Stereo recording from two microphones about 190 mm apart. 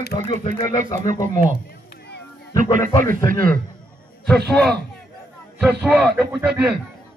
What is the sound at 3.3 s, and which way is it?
Speech, 50° right (ahead or behind).